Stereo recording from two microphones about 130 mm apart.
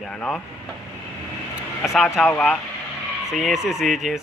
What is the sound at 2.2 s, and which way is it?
Speech, centre (ahead or behind).